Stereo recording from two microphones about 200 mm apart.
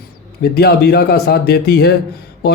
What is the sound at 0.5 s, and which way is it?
Speech, 55° left (ahead or behind).